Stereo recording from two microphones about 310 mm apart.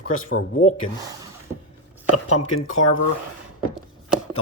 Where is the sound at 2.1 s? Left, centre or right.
Left.